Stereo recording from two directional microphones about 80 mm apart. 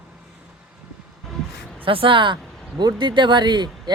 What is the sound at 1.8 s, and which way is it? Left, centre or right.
Speech, right.